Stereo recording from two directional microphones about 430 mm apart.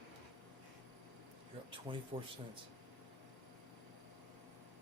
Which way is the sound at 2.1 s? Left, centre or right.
Centre.